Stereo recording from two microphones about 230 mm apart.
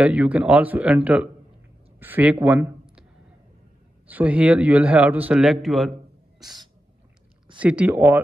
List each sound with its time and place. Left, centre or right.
0.0 s a man's voice: centre
4.1 s a man's voice: centre
6.4 s owl: centre
7.6 s speech: centre